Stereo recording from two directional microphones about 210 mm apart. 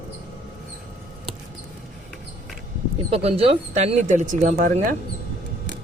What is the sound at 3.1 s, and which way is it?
Speech, 30° right (ahead or behind).